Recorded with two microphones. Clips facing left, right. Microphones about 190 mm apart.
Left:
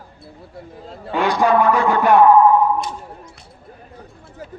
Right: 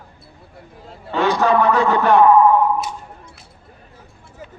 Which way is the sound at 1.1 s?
10° left (ahead or behind).